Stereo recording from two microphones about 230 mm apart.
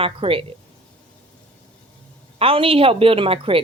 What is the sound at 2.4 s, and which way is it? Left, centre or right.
A woman's voice, right.